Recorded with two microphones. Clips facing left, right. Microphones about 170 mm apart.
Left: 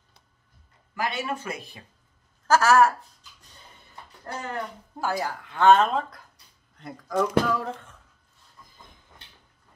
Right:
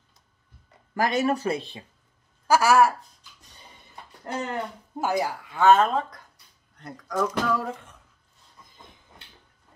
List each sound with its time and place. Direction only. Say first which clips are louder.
0.9 s speech: right 6 dB; 40° right (ahead or behind)
2.4 s a woman's voice: even; 10° right (ahead or behind)
4.3 s speech: right 3 dB; 20° right (ahead or behind)
5.4 s speech: left 1 dB; 5° right (ahead or behind)